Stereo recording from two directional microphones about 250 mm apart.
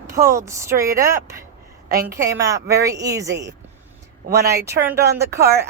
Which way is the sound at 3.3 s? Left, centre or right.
Right.